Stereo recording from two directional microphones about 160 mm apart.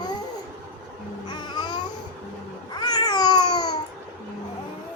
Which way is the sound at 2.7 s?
25° left (ahead or behind).